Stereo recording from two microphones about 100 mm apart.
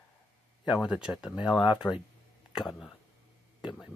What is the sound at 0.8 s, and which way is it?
Speech, 10° right (ahead or behind).